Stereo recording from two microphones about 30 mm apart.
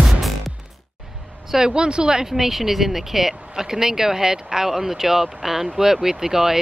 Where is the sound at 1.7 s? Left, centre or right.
Right.